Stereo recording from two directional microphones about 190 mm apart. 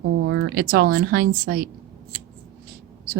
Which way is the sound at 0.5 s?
55° right (ahead or behind).